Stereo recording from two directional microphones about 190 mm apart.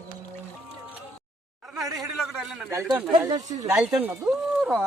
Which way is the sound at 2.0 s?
Centre (ahead or behind).